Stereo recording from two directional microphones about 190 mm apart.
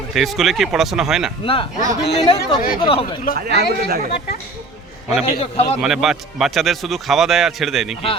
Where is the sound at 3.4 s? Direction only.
55° right (ahead or behind).